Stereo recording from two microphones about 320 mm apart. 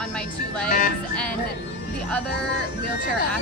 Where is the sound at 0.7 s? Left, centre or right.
Left.